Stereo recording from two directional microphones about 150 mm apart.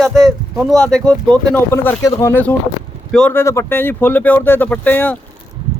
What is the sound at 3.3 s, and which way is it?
Speech, 20° left (ahead or behind).